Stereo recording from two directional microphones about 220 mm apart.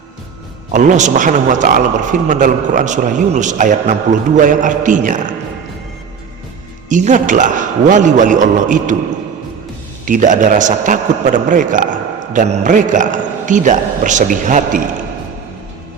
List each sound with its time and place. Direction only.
0.7 s a man's voice: 35° right (ahead or behind)
6.8 s a man's voice: 35° right (ahead or behind)
10.1 s a man's voice: 35° right (ahead or behind)